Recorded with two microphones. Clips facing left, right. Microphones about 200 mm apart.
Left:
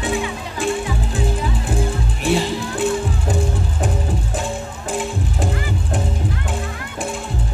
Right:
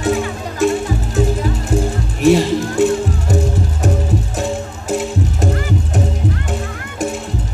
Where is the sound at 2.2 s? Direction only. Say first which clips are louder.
Right 8 dB; 40° right (ahead or behind).